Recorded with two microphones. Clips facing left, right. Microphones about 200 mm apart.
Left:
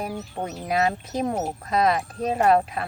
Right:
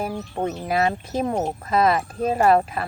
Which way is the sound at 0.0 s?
Centre (ahead or behind).